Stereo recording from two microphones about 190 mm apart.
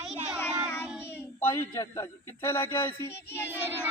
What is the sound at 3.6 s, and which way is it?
Crowd, 10° right (ahead or behind).